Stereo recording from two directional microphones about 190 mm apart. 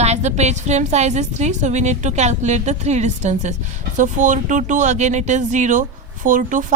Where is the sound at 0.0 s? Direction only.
35° right (ahead or behind).